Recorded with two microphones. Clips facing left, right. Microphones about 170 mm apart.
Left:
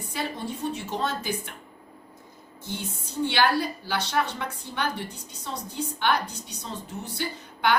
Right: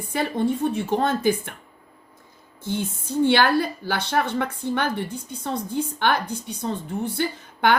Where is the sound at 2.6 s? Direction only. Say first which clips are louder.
Right 8 dB; 50° right (ahead or behind).